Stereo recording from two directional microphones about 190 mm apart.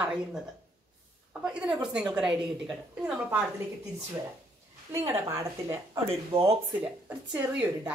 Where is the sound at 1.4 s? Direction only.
5° right (ahead or behind).